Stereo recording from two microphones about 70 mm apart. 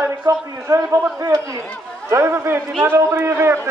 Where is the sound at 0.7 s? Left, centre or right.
Right.